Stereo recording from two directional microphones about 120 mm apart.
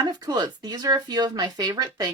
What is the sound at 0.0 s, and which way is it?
Speech, 30° right (ahead or behind).